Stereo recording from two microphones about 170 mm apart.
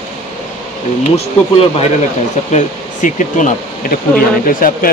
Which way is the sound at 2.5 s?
50° left (ahead or behind).